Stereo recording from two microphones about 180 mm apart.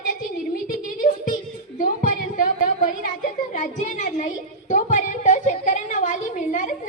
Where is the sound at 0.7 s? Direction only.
45° left (ahead or behind).